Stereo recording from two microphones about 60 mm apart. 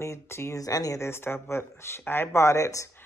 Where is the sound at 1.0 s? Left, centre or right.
Left.